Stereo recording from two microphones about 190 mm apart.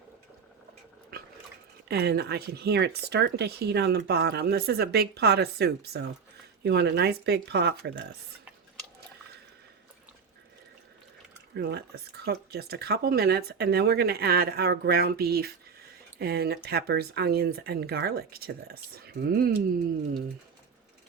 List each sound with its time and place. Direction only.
1.9 s speech: 60° right (ahead or behind)
11.5 s speech: 60° right (ahead or behind)